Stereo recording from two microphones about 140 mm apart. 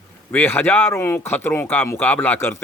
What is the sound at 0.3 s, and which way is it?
Speech, 15° left (ahead or behind).